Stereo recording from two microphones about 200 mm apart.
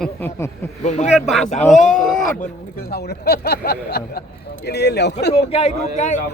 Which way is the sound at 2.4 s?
50° left (ahead or behind).